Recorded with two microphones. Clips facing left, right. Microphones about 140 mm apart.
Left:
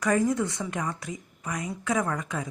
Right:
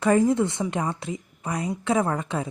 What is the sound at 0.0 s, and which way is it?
A woman's voice, 25° right (ahead or behind).